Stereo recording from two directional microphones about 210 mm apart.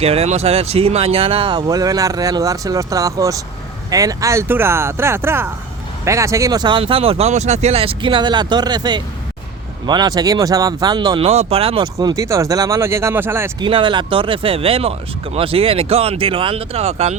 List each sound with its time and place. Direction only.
0.0 s speech: 30° right (ahead or behind)
11.9 s speech: 15° right (ahead or behind)
13.7 s speech: 25° right (ahead or behind)